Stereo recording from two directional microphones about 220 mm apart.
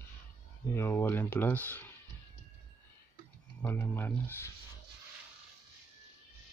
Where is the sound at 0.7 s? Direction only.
10° left (ahead or behind).